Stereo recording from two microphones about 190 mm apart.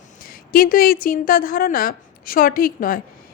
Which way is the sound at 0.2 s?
50° left (ahead or behind).